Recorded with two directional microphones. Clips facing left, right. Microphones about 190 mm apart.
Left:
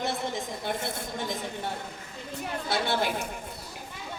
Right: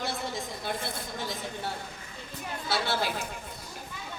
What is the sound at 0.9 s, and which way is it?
Speech, 20° left (ahead or behind).